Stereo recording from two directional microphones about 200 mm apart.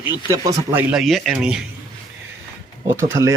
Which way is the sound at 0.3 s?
15° right (ahead or behind).